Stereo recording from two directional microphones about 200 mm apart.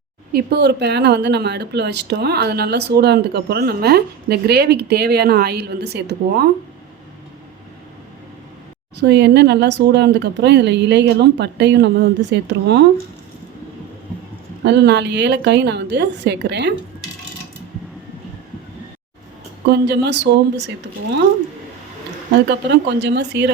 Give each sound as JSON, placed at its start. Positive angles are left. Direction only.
{"t": 0.3, "sound": "speech", "side_deg": -55}
{"t": 9.0, "sound": "speech", "side_deg": -60}
{"t": 14.6, "sound": "speech", "side_deg": -60}
{"t": 19.6, "sound": "speech", "side_deg": -55}
{"t": 22.4, "sound": "speech", "side_deg": -60}